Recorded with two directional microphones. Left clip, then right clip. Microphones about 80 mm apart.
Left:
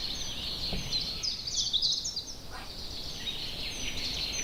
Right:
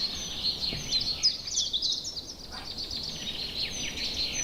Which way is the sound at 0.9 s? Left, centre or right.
Right.